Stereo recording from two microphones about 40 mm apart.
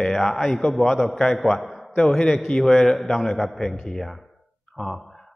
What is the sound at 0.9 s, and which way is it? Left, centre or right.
Speech, centre.